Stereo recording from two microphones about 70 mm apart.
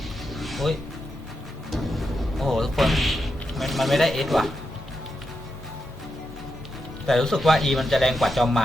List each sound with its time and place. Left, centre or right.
0.3 s music: centre
7.1 s a man's voice: centre